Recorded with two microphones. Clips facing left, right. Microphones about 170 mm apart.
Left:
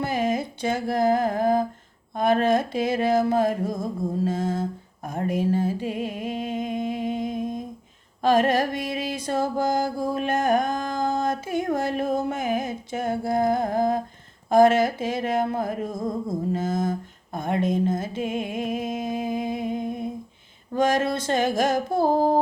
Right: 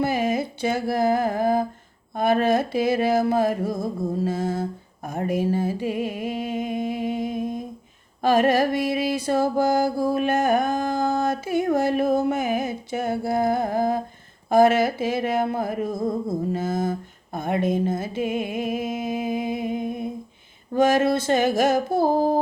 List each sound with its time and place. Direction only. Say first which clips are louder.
0.0 s mantra: right 2 dB; 10° right (ahead or behind)
5.0 s a sound: right 1 dB; 10° right (ahead or behind)
8.2 s mantra: right 1 dB; 10° right (ahead or behind)
11.3 s music: right 3 dB; 10° right (ahead or behind)
12.1 s mantra: right 3 dB; 10° right (ahead or behind)
15.9 s a sound: right 3 dB; 30° right (ahead or behind)
16.2 s mantra: right 1 dB; 10° right (ahead or behind)
17.3 s a sound: right 1 dB; 10° right (ahead or behind)
20.7 s mantra: right 3 dB; 5° right (ahead or behind)